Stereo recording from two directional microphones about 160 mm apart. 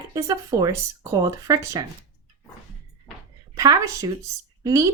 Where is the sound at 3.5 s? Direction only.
20° right (ahead or behind).